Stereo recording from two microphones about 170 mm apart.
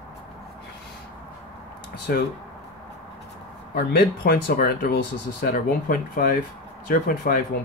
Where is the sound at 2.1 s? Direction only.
65° left (ahead or behind).